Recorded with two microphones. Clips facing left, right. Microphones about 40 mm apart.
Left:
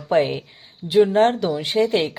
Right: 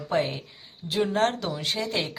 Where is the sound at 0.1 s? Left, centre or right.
Left.